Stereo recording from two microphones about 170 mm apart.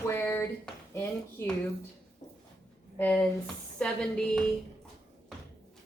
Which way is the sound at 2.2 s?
25° left (ahead or behind).